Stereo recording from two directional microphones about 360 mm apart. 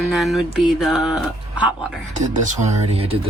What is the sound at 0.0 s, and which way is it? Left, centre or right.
Speech, centre.